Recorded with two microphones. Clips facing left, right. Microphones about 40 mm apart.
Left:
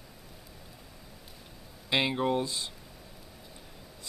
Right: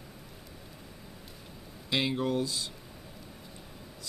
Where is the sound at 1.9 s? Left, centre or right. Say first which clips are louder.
Left 2 dB; left.